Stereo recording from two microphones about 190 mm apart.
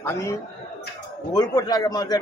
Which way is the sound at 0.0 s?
15° left (ahead or behind).